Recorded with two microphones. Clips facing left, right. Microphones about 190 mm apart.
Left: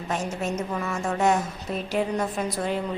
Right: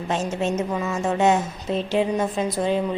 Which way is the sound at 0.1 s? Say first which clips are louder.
Right 4 dB; 25° right (ahead or behind).